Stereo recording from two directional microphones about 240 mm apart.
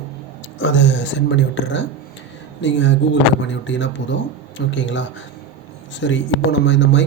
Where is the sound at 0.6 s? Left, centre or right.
Left.